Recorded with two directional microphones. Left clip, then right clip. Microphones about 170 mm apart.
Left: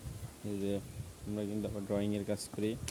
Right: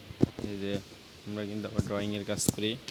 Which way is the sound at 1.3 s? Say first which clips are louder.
Right 3 dB; 20° left (ahead or behind).